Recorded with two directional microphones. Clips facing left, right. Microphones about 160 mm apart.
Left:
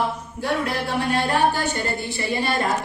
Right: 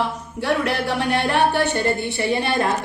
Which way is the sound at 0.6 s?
70° right (ahead or behind).